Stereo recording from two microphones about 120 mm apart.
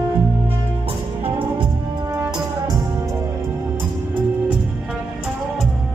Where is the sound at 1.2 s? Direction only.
40° right (ahead or behind).